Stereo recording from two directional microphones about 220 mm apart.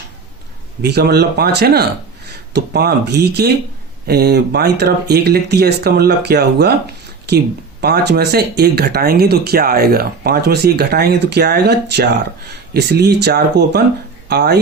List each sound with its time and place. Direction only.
0.8 s speech: 50° right (ahead or behind)